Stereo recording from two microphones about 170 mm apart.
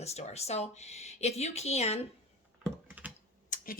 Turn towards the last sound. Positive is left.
turn(degrees=55)  # may be behind; listen again after turning